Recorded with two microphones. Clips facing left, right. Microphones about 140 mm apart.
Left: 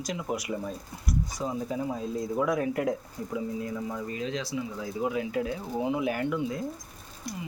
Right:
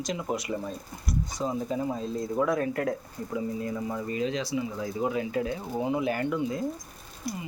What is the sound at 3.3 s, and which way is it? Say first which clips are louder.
Speech: right 1 dB; centre (ahead or behind).